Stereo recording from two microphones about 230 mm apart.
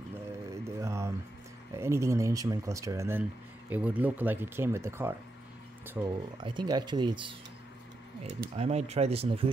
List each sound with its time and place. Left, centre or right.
0.7 s a sound: centre
1.8 s speech: centre
6.4 s speech: centre
8.5 s speech: right